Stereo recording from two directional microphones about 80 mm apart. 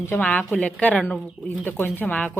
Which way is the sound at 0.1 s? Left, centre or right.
Centre.